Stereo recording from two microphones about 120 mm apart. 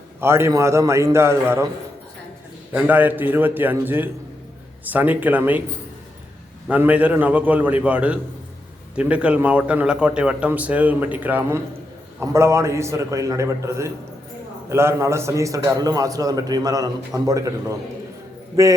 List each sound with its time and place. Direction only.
0.2 s a man's voice: 20° right (ahead or behind)
2.7 s speech: 15° right (ahead or behind)
6.7 s a man's voice: 10° right (ahead or behind); by 18.7 s 30° right (ahead or behind)